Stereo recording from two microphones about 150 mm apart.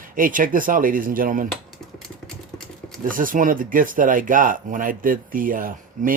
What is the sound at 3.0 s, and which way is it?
Speech, 65° right (ahead or behind).